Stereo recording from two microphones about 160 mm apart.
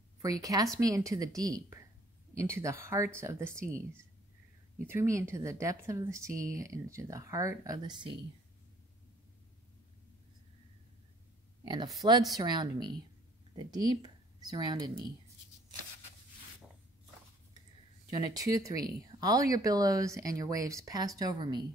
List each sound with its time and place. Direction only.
0.2 s speech: 20° right (ahead or behind)
4.8 s speech: 15° right (ahead or behind)
11.6 s speech: 25° right (ahead or behind)
18.2 s speech: 20° right (ahead or behind)